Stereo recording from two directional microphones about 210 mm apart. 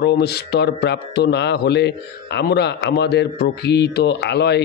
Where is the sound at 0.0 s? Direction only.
50° left (ahead or behind).